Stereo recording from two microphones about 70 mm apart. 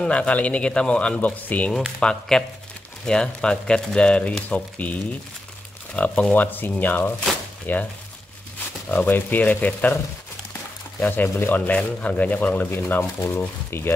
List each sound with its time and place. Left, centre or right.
0.0 s speech: centre
2.0 s speech: centre
11.0 s speech: left